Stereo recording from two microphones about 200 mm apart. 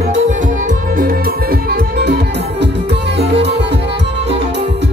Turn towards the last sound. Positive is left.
turn(degrees=-55)  # may be behind; listen again after turning